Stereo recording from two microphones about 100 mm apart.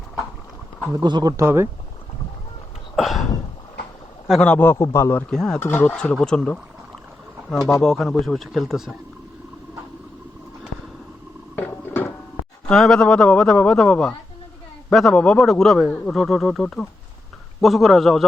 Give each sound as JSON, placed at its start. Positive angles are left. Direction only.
{"t": 0.9, "sound": "speech", "side_deg": -45}
{"t": 1.4, "sound": "speech", "side_deg": -25}
{"t": 2.9, "sound": "a sound", "side_deg": 0}
{"t": 4.4, "sound": "a man's voice", "side_deg": 15}
{"t": 4.8, "sound": "a man's voice", "side_deg": 30}
{"t": 5.3, "sound": "speech", "side_deg": 5}
{"t": 5.5, "sound": "a man's voice", "side_deg": 20}
{"t": 5.9, "sound": "a man's voice", "side_deg": 5}
{"t": 11.5, "sound": "a sound", "side_deg": 20}
{"t": 12.7, "sound": "a man's voice", "side_deg": 5}